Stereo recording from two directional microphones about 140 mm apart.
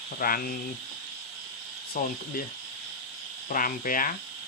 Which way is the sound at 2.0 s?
90° left.